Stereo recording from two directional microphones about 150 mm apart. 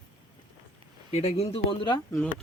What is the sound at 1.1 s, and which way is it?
Speech, 45° left (ahead or behind).